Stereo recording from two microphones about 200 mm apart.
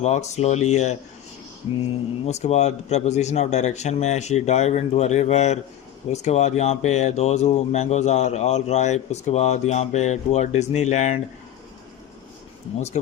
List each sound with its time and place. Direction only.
0.0 s speech: 35° left (ahead or behind)
2.2 s speech: 35° left (ahead or behind)